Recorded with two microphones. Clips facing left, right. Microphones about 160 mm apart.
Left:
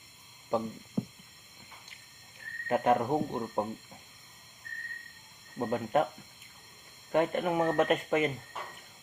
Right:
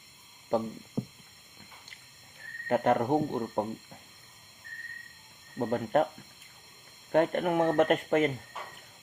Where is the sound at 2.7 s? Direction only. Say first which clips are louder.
Right 1 dB; 50° right (ahead or behind).